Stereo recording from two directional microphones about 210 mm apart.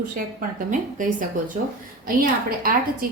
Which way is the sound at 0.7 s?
40° right (ahead or behind).